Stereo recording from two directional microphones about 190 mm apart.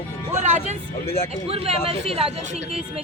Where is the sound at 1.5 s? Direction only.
30° right (ahead or behind).